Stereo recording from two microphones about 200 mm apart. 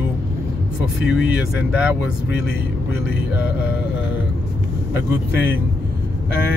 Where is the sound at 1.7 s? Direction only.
5° right (ahead or behind).